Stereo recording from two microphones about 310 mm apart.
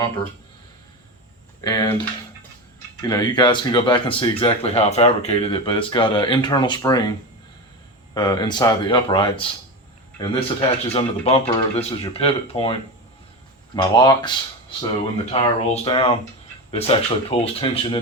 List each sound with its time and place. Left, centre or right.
1.6 s a man's voice: centre
13.9 s a man's voice: centre